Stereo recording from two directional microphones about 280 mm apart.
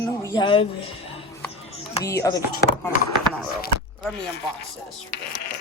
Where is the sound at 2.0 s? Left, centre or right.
Centre.